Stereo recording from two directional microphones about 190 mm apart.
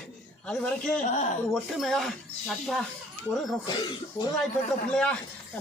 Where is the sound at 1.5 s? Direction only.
Centre (ahead or behind).